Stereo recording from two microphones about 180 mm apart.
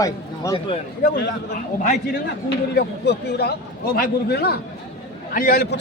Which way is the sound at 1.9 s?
65° left (ahead or behind).